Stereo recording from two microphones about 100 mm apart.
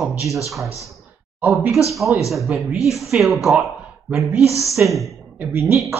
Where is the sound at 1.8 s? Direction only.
Centre (ahead or behind).